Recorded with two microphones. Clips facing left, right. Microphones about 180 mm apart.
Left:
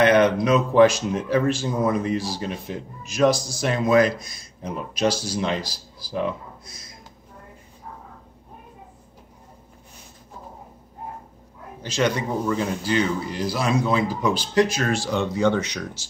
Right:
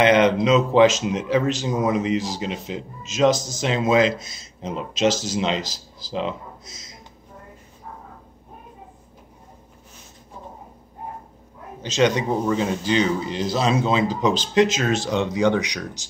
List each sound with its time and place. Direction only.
0.0 s speech: 20° right (ahead or behind)
11.8 s speech: 20° right (ahead or behind)